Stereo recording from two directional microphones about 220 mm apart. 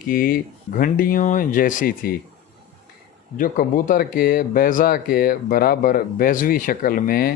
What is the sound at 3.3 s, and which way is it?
Speech, 40° left (ahead or behind).